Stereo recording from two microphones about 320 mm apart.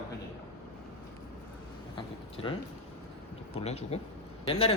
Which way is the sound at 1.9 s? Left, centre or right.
Centre.